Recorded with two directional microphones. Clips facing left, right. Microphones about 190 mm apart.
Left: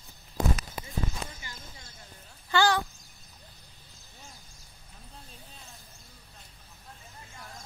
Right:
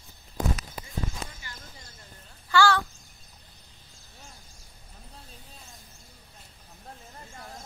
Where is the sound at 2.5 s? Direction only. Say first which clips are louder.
Right 2 dB; 20° left (ahead or behind).